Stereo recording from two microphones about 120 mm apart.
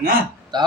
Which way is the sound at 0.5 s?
35° right (ahead or behind).